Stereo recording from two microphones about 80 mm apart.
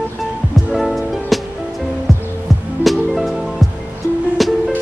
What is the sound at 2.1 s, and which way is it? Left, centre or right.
Music, right.